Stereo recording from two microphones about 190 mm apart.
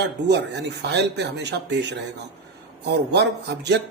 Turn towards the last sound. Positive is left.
turn(degrees=-60)  # may be behind; listen again after turning